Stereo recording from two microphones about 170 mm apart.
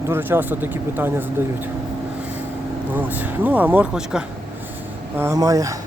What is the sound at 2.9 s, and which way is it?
Speech, 10° right (ahead or behind).